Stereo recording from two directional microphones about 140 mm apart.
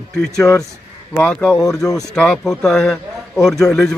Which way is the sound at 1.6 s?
25° left (ahead or behind).